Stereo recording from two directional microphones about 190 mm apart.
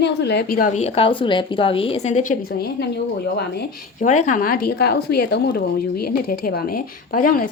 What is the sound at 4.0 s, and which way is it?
A woman's voice, 40° left (ahead or behind).